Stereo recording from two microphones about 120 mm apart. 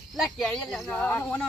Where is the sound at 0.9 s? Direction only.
15° left (ahead or behind).